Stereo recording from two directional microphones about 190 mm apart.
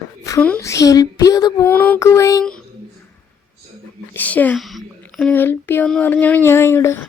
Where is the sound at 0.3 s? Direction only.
10° left (ahead or behind).